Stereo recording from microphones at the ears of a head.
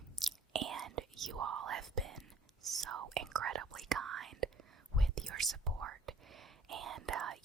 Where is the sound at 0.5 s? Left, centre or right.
Right.